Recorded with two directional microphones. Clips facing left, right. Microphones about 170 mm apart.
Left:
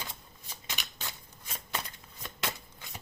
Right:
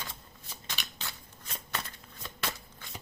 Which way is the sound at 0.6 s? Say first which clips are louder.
Left 1 dB; 15° left (ahead or behind).